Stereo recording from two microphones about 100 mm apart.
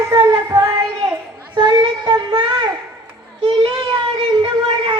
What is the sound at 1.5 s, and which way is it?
Child singing, 50° right (ahead or behind).